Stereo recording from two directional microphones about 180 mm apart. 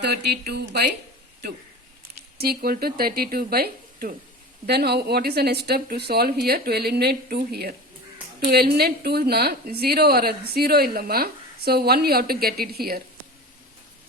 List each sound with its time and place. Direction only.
0.0 s a woman's voice: 65° right (ahead or behind)
2.4 s a woman's voice: 60° right (ahead or behind)